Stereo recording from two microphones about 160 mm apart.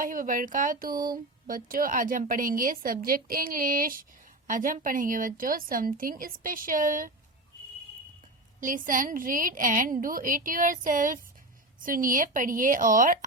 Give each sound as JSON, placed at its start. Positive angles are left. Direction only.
{"t": 0.0, "sound": "a woman's voice", "side_deg": -60}
{"t": 0.9, "sound": "a sound", "side_deg": -25}
{"t": 1.5, "sound": "a woman's voice", "side_deg": -60}
{"t": 8.6, "sound": "a woman's voice", "side_deg": -55}